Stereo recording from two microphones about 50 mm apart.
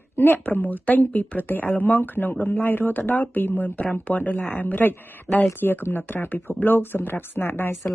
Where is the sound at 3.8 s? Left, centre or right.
Left.